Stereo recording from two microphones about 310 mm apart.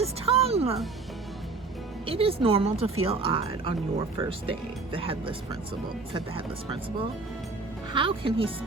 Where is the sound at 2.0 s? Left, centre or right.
Centre.